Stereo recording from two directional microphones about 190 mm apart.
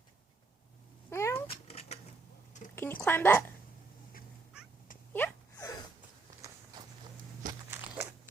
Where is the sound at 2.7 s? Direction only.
10° left (ahead or behind).